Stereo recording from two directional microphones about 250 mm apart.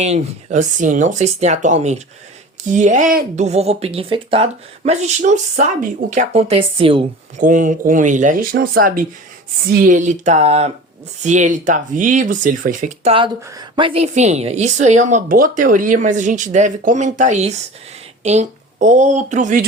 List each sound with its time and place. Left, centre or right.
0.0 s speech: right